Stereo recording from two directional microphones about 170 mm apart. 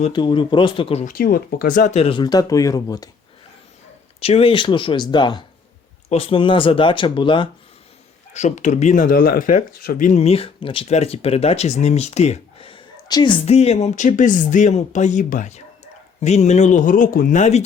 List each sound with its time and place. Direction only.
0.1 s speech: 25° left (ahead or behind)
1.0 s speech: 60° left (ahead or behind)
2.0 s speech: 30° left (ahead or behind)
4.2 s speech: 35° left (ahead or behind)
8.3 s speech: 45° left (ahead or behind)